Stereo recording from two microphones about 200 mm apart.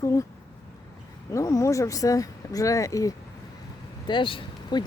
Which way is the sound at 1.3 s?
15° left (ahead or behind).